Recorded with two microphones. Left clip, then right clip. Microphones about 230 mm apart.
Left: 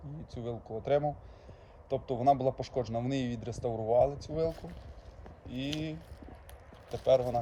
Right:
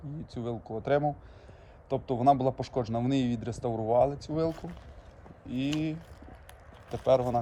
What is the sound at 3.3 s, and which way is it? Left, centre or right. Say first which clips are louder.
Speech: right 4 dB; centre.